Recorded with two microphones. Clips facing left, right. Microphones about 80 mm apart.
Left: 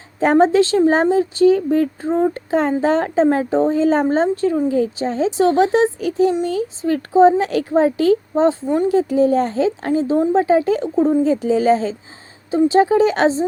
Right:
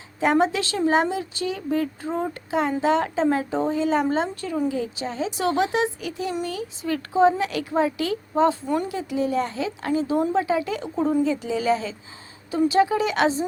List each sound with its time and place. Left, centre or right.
0.2 s speech: left